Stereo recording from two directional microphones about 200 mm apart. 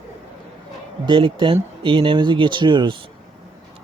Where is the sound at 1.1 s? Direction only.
25° right (ahead or behind).